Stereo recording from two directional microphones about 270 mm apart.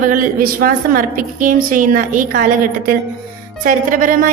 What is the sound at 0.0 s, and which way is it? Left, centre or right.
A woman's voice, right.